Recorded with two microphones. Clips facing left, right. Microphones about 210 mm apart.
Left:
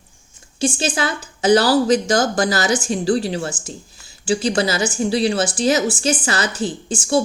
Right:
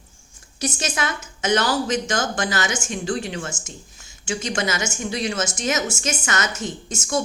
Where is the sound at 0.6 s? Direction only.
30° left (ahead or behind).